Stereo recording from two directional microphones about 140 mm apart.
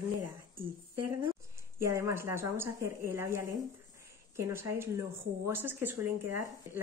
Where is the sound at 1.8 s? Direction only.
20° right (ahead or behind).